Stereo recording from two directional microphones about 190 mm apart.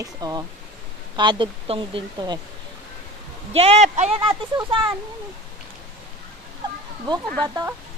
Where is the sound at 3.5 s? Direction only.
35° right (ahead or behind).